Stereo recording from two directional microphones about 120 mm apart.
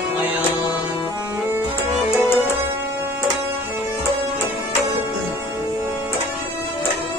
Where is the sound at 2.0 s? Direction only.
20° left (ahead or behind).